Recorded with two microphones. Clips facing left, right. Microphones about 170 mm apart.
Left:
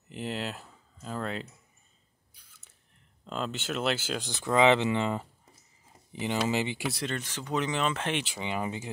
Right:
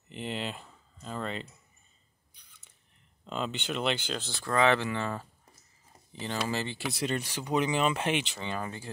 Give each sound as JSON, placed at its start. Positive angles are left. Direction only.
{"t": 0.1, "sound": "a sound", "side_deg": 5}
{"t": 3.3, "sound": "speech", "side_deg": 0}
{"t": 4.3, "sound": "speech", "side_deg": 20}
{"t": 7.1, "sound": "speech", "side_deg": -10}
{"t": 8.4, "sound": "speech", "side_deg": 15}